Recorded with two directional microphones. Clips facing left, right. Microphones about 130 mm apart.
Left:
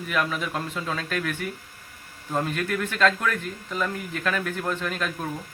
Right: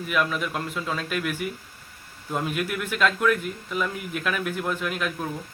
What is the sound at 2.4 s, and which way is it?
Speech, 10° right (ahead or behind).